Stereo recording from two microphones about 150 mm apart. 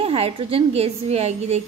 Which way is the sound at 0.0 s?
40° right (ahead or behind).